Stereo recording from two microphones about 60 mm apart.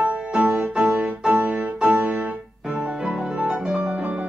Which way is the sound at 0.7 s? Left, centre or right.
Centre.